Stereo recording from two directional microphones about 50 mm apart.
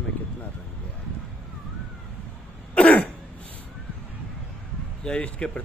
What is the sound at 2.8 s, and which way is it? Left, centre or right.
Throat clearing, left.